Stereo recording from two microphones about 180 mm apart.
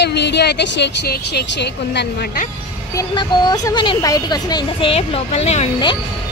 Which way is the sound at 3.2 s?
25° left (ahead or behind).